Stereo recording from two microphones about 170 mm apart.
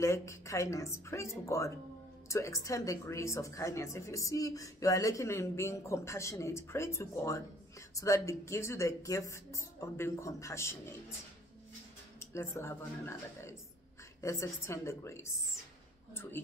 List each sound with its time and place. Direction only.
0.0 s a woman's voice: 15° left (ahead or behind)
12.2 s a woman's voice: 15° left (ahead or behind)